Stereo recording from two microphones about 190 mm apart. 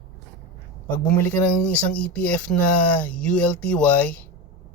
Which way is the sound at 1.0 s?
10° left (ahead or behind).